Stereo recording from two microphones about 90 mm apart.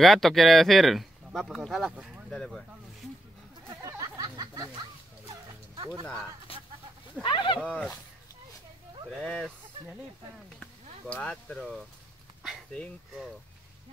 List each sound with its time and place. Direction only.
0.0 s speech: centre (ahead or behind)
2.0 s speech: 15° right (ahead or behind)
2.3 s speech: 5° left (ahead or behind)
3.8 s a sound: 45° right (ahead or behind)
6.5 s a sound: 90° left
7.2 s speech: 60° left (ahead or behind)
7.6 s speech: 15° left (ahead or behind)
9.2 s speech: 10° left (ahead or behind)
10.6 s speech: 15° left (ahead or behind)